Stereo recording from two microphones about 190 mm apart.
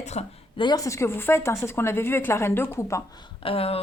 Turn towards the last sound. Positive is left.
turn(degrees=30)  # may be behind; listen again after turning